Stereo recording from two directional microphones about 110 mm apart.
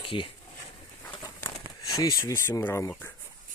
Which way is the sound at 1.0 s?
40° left (ahead or behind).